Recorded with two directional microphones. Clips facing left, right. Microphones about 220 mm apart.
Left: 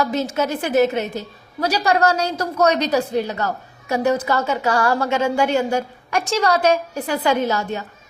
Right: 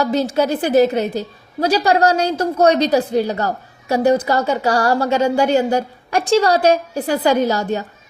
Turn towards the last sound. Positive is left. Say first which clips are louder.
# right 4 dB
turn(degrees=-35)  # may be behind; listen again after turning